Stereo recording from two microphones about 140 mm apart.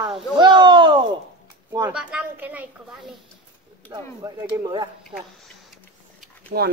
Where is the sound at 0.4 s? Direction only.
35° right (ahead or behind).